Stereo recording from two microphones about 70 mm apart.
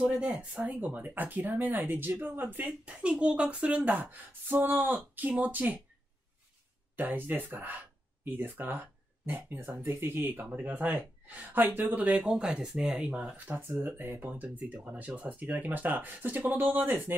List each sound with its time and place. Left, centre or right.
0.2 s speech: centre
7.0 s speech: right
12.3 s speech: centre
13.6 s speech: right